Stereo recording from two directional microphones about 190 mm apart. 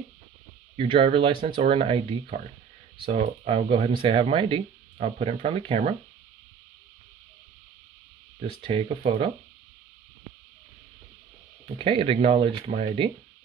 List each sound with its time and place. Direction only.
0.7 s speech: 30° right (ahead or behind)
8.4 s speech: 30° right (ahead or behind)
11.8 s speech: 30° right (ahead or behind)